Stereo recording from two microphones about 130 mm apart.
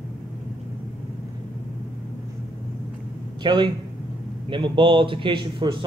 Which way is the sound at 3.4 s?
35° right (ahead or behind).